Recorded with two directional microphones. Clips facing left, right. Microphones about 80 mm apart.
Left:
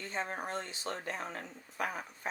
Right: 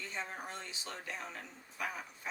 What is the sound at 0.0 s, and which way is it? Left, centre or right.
Speech, left.